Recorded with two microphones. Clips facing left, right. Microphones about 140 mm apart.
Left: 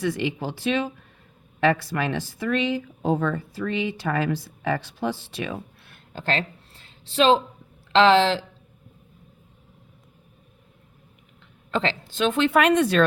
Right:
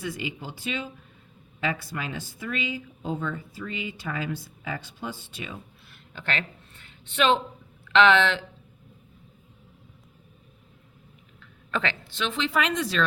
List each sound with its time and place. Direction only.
0.0 s speech: 80° left
1.6 s speech: 75° left (ahead or behind)
5.9 s a sound: 35° left (ahead or behind)
7.9 s speech: 35° left (ahead or behind)
11.7 s a woman's voice: 30° left (ahead or behind)
12.1 s speech: 50° left (ahead or behind)